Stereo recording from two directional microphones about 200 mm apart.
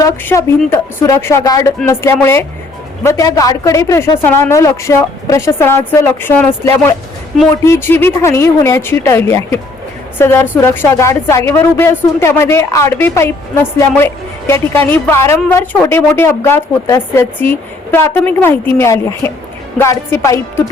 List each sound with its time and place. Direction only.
0.0 s speech: 15° left (ahead or behind)
7.5 s speech: 15° left (ahead or behind)